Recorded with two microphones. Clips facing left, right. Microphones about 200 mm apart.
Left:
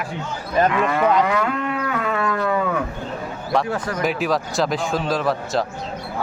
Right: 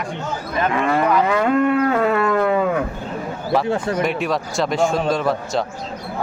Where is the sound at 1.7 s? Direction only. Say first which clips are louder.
Right 7 dB; 40° right (ahead or behind).